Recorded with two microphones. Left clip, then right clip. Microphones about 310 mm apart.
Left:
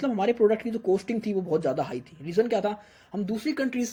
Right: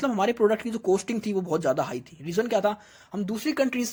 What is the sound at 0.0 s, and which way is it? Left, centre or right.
Speech, right.